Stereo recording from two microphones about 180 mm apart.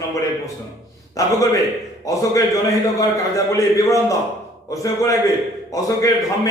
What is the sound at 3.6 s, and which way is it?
Speech, 20° left (ahead or behind).